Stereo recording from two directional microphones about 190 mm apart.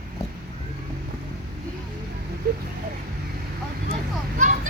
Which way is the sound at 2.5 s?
55° right (ahead or behind).